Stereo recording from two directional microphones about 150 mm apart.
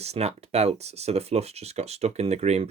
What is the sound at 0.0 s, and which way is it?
Speech, 45° right (ahead or behind).